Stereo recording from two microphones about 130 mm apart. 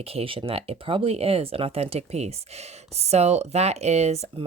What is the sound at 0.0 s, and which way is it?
Speech, 50° right (ahead or behind).